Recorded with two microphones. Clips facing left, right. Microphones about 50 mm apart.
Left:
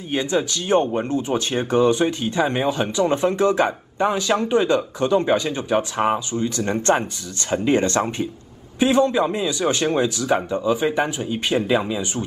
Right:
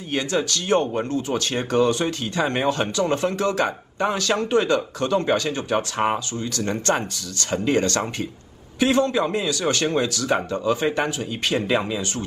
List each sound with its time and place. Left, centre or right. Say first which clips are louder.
0.1 s speech: left 2 dB; centre
11.6 s speech: left 2 dB; centre